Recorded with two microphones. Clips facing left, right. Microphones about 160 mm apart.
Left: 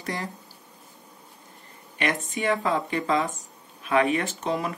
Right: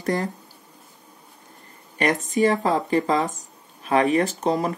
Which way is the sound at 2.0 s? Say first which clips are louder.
Right 7 dB; 40° right (ahead or behind).